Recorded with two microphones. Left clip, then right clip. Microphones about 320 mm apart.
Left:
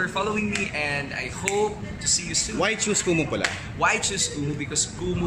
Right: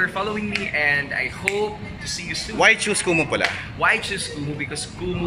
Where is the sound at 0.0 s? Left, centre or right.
Centre.